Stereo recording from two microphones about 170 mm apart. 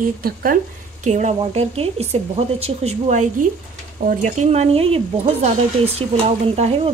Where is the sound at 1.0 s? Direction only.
45° right (ahead or behind).